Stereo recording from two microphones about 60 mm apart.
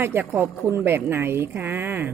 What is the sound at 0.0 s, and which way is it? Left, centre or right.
A woman's voice, right.